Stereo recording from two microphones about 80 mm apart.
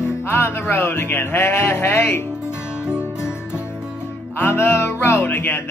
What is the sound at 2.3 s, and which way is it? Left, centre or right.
Music, centre.